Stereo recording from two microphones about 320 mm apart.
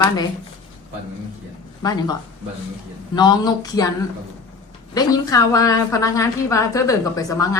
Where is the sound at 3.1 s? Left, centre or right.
Centre.